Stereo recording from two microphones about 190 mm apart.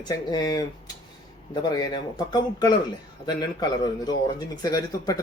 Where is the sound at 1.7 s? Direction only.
20° left (ahead or behind).